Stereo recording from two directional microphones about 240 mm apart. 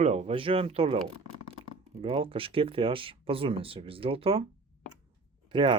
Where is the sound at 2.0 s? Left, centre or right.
Right.